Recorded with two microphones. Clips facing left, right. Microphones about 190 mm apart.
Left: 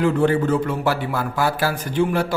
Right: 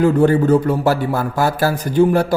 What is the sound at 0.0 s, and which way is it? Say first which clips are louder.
Speech: right 5 dB; 40° right (ahead or behind).